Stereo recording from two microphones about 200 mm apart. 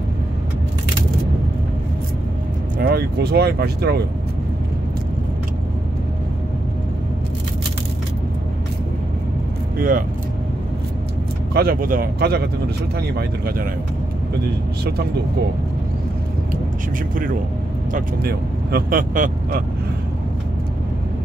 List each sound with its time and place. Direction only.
2.8 s speech: 50° right (ahead or behind)
9.8 s speech: 45° right (ahead or behind)
11.5 s speech: 45° right (ahead or behind)
17.1 s speech: 40° right (ahead or behind)